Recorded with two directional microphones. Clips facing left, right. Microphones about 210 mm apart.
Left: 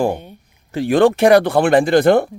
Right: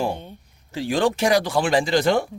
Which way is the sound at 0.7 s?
55° left (ahead or behind).